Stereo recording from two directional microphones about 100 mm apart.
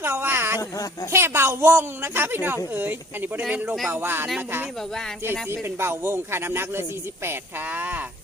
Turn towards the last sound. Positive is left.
turn(degrees=-20)  # may be behind; listen again after turning